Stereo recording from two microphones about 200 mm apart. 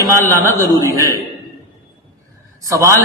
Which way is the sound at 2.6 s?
15° right (ahead or behind).